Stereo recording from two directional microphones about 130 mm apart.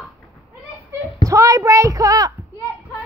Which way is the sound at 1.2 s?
25° right (ahead or behind).